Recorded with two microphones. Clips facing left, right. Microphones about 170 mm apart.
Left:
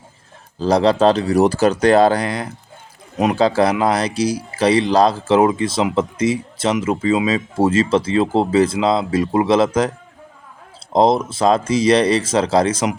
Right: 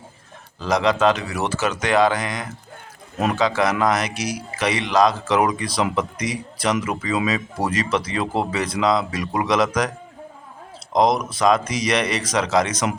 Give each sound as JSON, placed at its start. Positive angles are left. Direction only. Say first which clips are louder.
{"t": 0.6, "sound": "speech", "louder": "left 5 dB", "side_deg": 30}
{"t": 10.9, "sound": "speech", "louder": "left 4 dB", "side_deg": 30}